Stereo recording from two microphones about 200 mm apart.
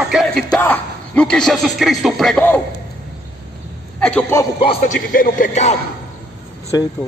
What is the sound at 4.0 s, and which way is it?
Speech, 5° left (ahead or behind).